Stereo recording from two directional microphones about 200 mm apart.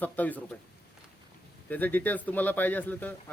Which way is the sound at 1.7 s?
10° left (ahead or behind).